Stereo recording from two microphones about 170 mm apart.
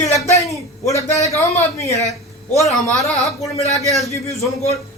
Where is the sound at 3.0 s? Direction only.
Centre (ahead or behind).